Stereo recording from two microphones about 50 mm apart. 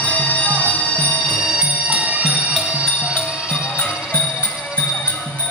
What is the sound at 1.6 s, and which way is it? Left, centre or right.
Music, right.